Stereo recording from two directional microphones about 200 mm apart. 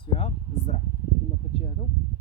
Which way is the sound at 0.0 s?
30° left (ahead or behind).